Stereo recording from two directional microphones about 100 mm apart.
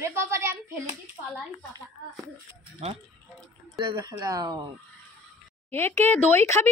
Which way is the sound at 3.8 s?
45° right (ahead or behind).